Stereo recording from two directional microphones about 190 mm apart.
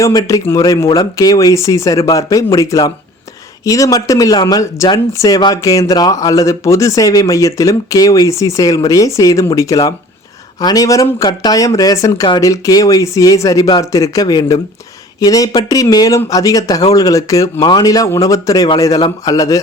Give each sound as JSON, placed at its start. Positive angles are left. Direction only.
{"t": 0.0, "sound": "speech", "side_deg": 20}